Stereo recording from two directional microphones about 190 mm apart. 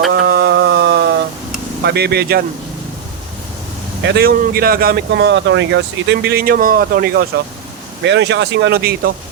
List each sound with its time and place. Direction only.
0.1 s a sound: 55° right (ahead or behind)
1.8 s speech: 60° right (ahead or behind)
4.0 s speech: 55° right (ahead or behind)
8.0 s speech: 65° right (ahead or behind)